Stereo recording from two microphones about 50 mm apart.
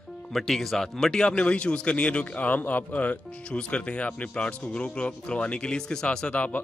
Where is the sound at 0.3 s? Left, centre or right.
Centre.